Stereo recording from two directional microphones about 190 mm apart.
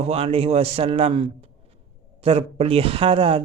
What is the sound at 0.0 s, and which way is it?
A man's voice, 30° right (ahead or behind).